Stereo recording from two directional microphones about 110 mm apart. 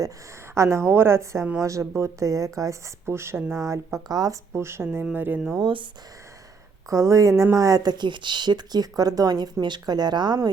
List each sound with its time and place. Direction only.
0.5 s speech: 25° right (ahead or behind)
4.5 s speech: 25° right (ahead or behind)
5.5 s speech: 50° right (ahead or behind)
6.9 s speech: 30° right (ahead or behind)